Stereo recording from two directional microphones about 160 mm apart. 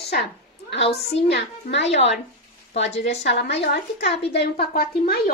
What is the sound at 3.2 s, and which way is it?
A woman's voice, 90° left.